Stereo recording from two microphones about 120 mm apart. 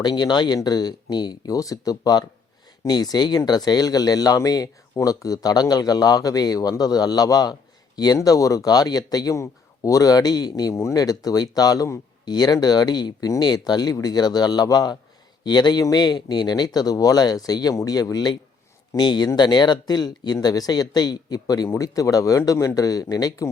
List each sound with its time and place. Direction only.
0.0 s speech: 35° left (ahead or behind)